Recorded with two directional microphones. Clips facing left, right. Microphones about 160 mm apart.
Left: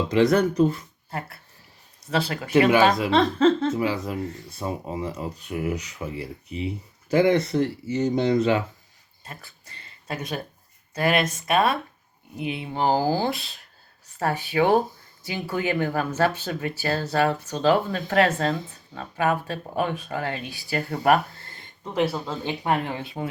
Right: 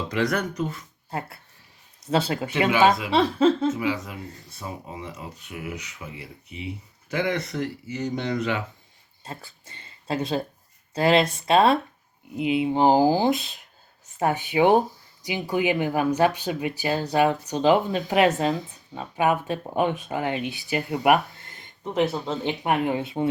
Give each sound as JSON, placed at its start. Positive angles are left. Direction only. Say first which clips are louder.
{"t": 0.1, "sound": "speech", "louder": "left 7 dB", "side_deg": 25}
{"t": 2.0, "sound": "speech", "louder": "right 2 dB", "side_deg": -25}
{"t": 3.1, "sound": "speech", "louder": "left 1 dB", "side_deg": -10}
{"t": 3.8, "sound": "speech", "louder": "left 2 dB", "side_deg": 40}
{"t": 9.2, "sound": "speech", "louder": "right 4 dB", "side_deg": -25}